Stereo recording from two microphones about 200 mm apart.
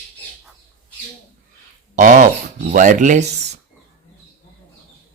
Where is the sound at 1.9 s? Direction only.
40° right (ahead or behind).